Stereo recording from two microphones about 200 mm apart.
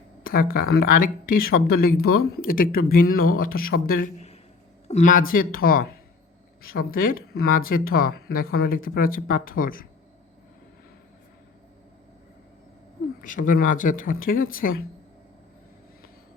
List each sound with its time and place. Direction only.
0.3 s speech: 45° left (ahead or behind)
13.2 s speech: 40° left (ahead or behind)